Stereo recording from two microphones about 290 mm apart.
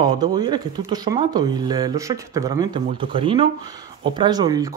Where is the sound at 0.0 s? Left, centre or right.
Centre.